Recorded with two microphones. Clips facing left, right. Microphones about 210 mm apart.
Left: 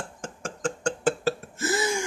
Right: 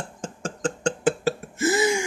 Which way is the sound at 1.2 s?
15° right (ahead or behind).